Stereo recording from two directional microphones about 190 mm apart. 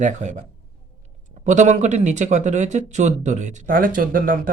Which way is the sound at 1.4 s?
40° right (ahead or behind).